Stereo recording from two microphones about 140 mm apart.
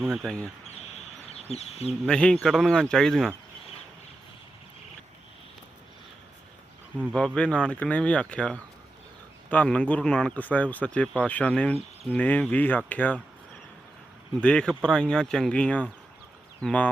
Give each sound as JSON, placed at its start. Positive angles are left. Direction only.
{"t": 0.0, "sound": "speech", "side_deg": 0}
{"t": 1.3, "sound": "speech", "side_deg": 50}
{"t": 2.0, "sound": "speech", "side_deg": 5}
{"t": 7.3, "sound": "speech", "side_deg": 5}
{"t": 14.4, "sound": "speech", "side_deg": 5}